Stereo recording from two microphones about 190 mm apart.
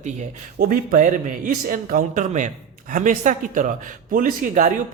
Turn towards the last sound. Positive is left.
turn(degrees=-45)  # may be behind; listen again after turning